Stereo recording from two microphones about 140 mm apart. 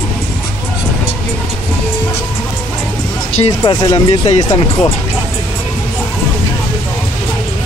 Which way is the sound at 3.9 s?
40° left (ahead or behind).